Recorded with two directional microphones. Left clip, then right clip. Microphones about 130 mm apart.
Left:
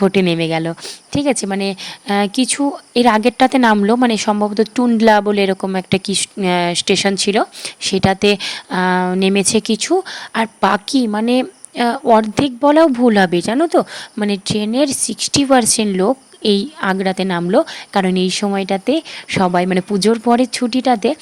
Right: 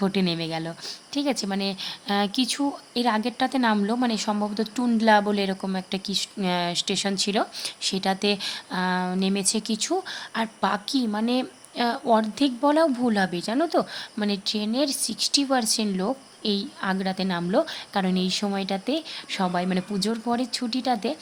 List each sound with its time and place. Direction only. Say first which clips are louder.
0.0 s speech: left 11 dB; 70° left (ahead or behind)
3.8 s speech: left 11 dB; 65° left (ahead or behind)
13.6 s speech: left 6 dB; 50° left (ahead or behind); by 21.2 s 65° left (ahead or behind)